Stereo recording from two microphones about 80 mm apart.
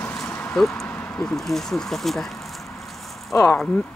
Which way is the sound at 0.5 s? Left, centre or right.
Centre.